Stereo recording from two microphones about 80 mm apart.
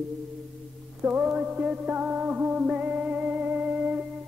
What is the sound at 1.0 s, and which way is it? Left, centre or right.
Music, centre.